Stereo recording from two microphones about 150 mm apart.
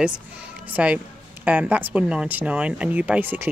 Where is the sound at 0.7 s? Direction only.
10° right (ahead or behind).